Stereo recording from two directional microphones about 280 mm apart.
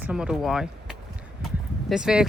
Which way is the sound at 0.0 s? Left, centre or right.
Centre.